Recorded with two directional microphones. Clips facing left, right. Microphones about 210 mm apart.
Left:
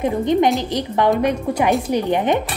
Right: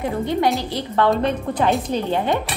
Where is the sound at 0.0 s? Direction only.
20° left (ahead or behind).